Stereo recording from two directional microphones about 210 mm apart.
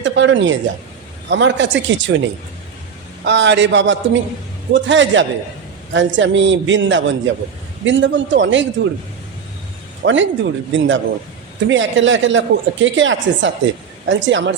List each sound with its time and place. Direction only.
0.0 s a woman's voice: 60° right (ahead or behind)
10.0 s a woman's voice: 60° right (ahead or behind)